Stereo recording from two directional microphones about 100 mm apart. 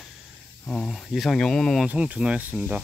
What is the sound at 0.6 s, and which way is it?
Speech, 5° left (ahead or behind).